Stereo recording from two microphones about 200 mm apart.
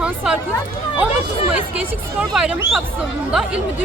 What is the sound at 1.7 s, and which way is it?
Speech, 5° right (ahead or behind).